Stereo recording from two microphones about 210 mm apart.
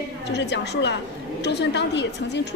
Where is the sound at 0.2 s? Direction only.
55° left (ahead or behind).